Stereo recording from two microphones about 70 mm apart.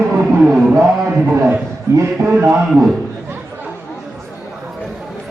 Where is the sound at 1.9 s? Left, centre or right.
Right.